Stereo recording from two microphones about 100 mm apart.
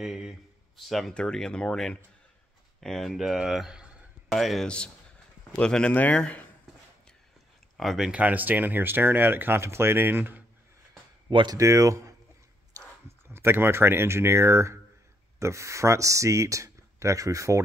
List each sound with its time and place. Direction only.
0.0 s speech: 5° right (ahead or behind)
4.3 s speech: centre (ahead or behind)
7.7 s speech: centre (ahead or behind)
8.1 s speech: 15° right (ahead or behind)
11.2 s speech: 55° right (ahead or behind)
11.5 s speech: 30° right (ahead or behind)
13.3 s speech: 25° right (ahead or behind)